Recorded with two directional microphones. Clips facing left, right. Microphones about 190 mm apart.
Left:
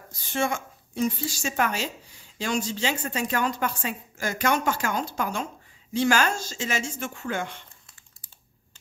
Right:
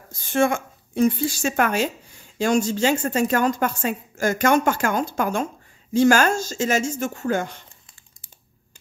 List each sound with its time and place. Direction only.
0.1 s a woman's voice: 50° right (ahead or behind)